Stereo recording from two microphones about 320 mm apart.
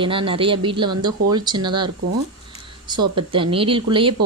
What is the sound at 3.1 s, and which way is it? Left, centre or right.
A woman's voice, centre.